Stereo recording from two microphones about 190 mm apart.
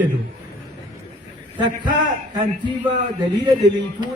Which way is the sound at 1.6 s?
25° right (ahead or behind).